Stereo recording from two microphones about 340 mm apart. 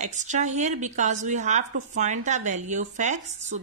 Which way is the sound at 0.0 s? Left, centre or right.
Right.